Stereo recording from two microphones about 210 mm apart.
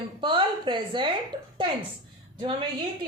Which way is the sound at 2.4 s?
25° right (ahead or behind).